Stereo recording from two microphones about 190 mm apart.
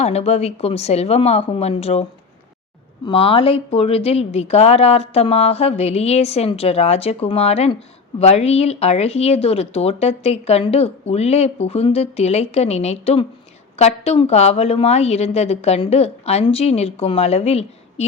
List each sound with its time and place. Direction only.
0.0 s speech: 35° left (ahead or behind)
3.1 s speech: 30° left (ahead or behind)